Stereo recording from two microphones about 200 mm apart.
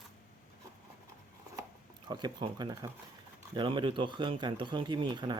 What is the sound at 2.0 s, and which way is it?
Speech, 20° right (ahead or behind).